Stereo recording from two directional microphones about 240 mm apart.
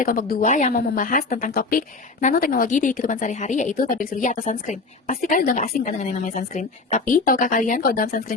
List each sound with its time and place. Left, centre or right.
0.0 s a woman's voice: left